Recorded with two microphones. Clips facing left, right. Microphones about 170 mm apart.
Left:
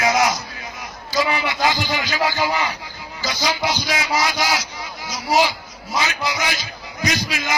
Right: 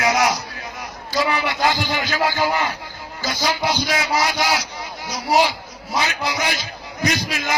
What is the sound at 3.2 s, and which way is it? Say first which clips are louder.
Music: right 1 dB; 50° right (ahead or behind).